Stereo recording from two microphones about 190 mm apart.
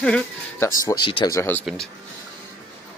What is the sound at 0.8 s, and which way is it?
Speech, 20° left (ahead or behind).